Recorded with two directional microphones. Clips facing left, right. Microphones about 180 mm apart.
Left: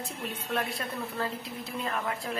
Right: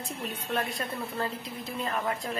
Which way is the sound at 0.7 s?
Centre (ahead or behind).